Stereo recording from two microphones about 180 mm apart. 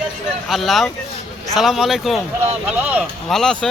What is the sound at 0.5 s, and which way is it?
Speech, centre (ahead or behind).